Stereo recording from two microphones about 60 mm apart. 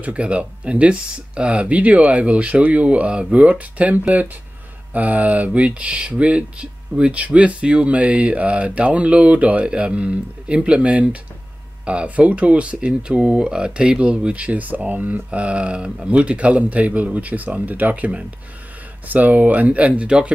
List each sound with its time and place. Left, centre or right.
0.0 s speech: right